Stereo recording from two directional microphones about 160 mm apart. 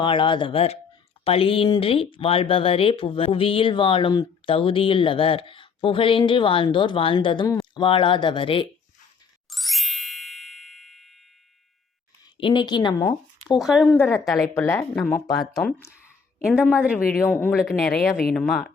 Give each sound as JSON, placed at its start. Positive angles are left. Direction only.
{"t": 0.0, "sound": "speech", "side_deg": 30}
{"t": 9.5, "sound": "ding", "side_deg": 0}
{"t": 12.4, "sound": "speech", "side_deg": 30}
{"t": 13.6, "sound": "speech", "side_deg": 0}
{"t": 14.5, "sound": "speech", "side_deg": 15}
{"t": 15.4, "sound": "speech", "side_deg": 5}
{"t": 15.9, "sound": "a sound", "side_deg": -10}
{"t": 17.2, "sound": "speech", "side_deg": 10}
{"t": 17.5, "sound": "speech", "side_deg": 0}